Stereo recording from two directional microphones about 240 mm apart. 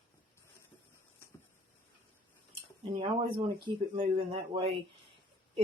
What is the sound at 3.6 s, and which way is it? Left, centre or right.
A woman's voice, centre.